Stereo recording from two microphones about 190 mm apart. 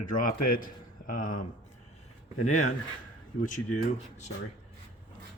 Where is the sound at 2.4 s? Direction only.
40° left (ahead or behind).